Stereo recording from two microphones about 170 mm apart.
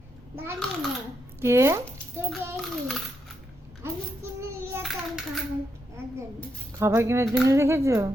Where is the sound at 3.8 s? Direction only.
15° right (ahead or behind).